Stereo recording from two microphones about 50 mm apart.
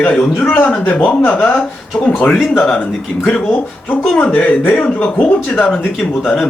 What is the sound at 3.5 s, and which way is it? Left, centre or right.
A man's voice, left.